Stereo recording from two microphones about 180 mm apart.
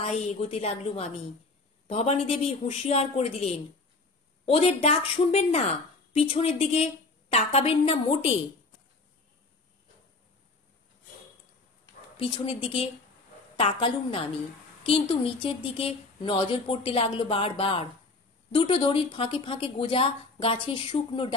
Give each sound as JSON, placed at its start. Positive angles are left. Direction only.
{"t": 0.0, "sound": "a woman's voice", "side_deg": 35}
{"t": 12.2, "sound": "a woman's voice", "side_deg": 30}
{"t": 14.8, "sound": "a sound", "side_deg": 30}
{"t": 15.4, "sound": "speech", "side_deg": 30}